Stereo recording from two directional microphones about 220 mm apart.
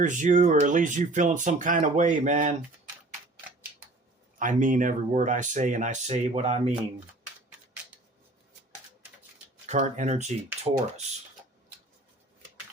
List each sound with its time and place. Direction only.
0.0 s speech: 35° right (ahead or behind)
4.4 s speech: 35° right (ahead or behind)
9.6 s speech: 35° right (ahead or behind)